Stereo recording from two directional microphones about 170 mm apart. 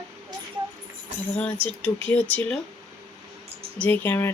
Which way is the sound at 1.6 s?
10° left (ahead or behind).